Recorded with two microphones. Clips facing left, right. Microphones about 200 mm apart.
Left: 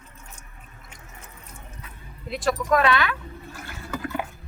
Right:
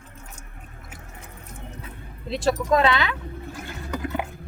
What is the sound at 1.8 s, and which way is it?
Speech, 25° right (ahead or behind).